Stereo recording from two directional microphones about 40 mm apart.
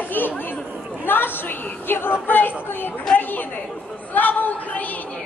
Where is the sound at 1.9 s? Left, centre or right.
Left.